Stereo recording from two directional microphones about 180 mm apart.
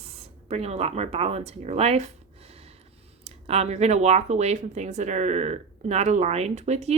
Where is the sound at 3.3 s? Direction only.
35° right (ahead or behind).